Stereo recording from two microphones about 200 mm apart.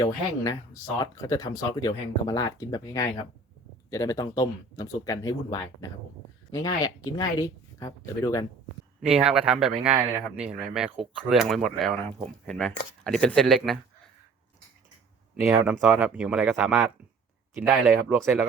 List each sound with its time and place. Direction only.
0.0 s speech: 15° left (ahead or behind)
9.0 s speech: 5° right (ahead or behind)
15.4 s speech: 5° right (ahead or behind)